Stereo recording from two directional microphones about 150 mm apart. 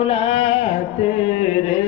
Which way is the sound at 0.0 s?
40° left (ahead or behind).